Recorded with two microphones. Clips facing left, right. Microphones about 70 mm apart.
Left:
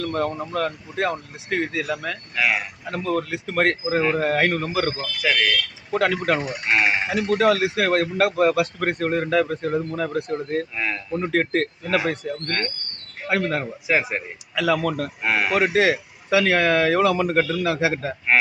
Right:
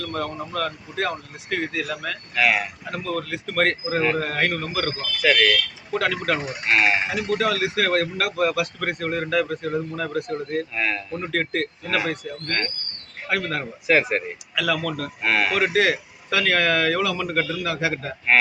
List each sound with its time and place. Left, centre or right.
0.0 s speech: left
2.3 s speech: centre
2.9 s speech: left
4.9 s speech: centre
5.9 s speech: left
6.7 s speech: centre
7.1 s speech: left
13.8 s speech: centre
14.5 s speech: left
14.8 s speech: left
15.2 s speech: centre
15.5 s speech: left